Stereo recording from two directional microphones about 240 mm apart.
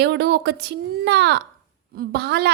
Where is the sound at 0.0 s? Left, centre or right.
Right.